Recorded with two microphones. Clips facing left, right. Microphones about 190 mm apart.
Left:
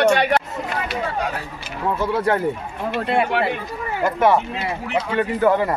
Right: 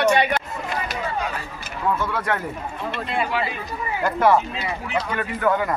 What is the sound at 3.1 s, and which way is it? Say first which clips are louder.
Speech: left 5 dB; 65° left (ahead or behind).